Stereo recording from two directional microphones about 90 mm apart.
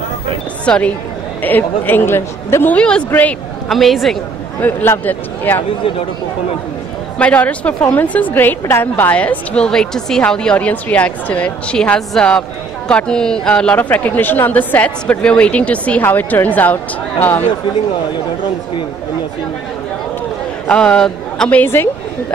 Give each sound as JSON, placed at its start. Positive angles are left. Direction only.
{"t": 0.7, "sound": "a woman's voice", "side_deg": 10}
{"t": 3.6, "sound": "a woman's voice", "side_deg": 0}
{"t": 4.6, "sound": "speech", "side_deg": 20}
{"t": 7.2, "sound": "a woman's voice", "side_deg": 15}
{"t": 20.6, "sound": "a man's voice", "side_deg": 10}
{"t": 21.5, "sound": "speech", "side_deg": 25}